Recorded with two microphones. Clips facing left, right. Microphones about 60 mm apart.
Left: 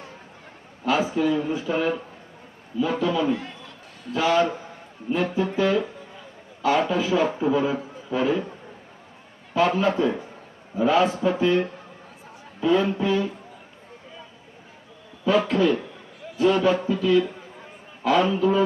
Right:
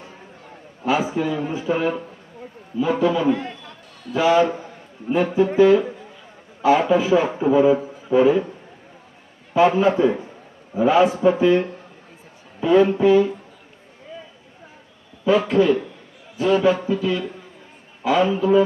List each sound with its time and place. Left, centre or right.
0.9 s a man's voice: centre
9.6 s speech: centre
15.2 s speech: centre